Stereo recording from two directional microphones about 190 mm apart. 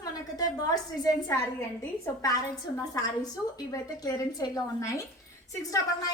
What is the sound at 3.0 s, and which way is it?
A woman's voice, 20° left (ahead or behind).